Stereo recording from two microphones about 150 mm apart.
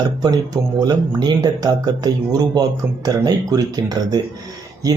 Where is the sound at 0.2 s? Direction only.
25° right (ahead or behind).